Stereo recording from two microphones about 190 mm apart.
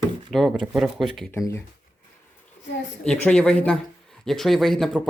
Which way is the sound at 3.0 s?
5° left (ahead or behind).